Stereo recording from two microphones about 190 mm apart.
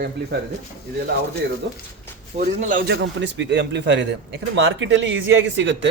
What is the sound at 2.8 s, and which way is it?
A man's voice, 70° right (ahead or behind).